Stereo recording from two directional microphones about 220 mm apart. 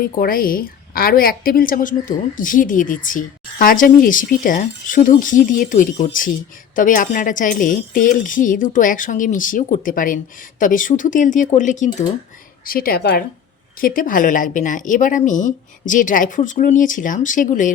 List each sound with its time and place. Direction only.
0.0 s a woman's voice: 40° left (ahead or behind)